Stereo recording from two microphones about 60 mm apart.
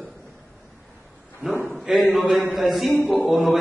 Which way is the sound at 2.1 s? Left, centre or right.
Centre.